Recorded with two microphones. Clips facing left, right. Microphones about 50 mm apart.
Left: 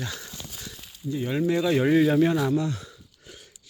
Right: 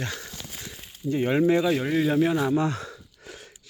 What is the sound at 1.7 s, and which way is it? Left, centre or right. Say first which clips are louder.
Speech: left 3 dB; centre.